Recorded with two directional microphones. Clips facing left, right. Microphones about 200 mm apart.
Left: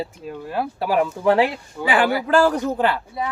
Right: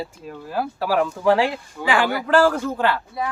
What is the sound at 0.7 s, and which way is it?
Speech, 15° left (ahead or behind).